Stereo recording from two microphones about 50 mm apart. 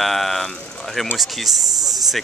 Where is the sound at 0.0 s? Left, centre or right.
Centre.